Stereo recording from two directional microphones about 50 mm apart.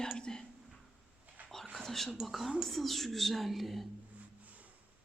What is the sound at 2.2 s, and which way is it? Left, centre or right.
Speech, centre.